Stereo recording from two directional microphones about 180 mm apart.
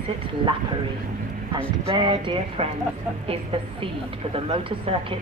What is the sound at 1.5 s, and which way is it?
Speech, 25° right (ahead or behind).